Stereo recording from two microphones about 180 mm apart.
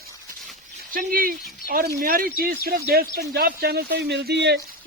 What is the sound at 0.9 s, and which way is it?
Speech, 50° right (ahead or behind).